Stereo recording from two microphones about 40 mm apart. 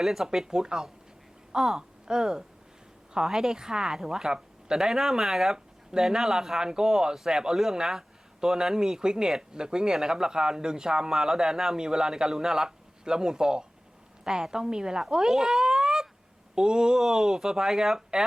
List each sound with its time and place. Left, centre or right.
0.0 s a woman's voice: centre